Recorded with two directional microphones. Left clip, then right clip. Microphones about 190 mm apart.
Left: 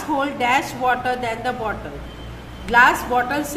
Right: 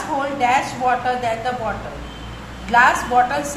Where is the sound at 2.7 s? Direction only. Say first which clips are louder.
Even; 25° left (ahead or behind).